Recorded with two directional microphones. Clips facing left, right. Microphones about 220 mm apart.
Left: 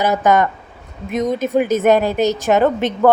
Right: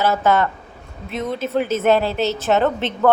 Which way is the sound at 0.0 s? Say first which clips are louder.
Left 2 dB; 15° left (ahead or behind).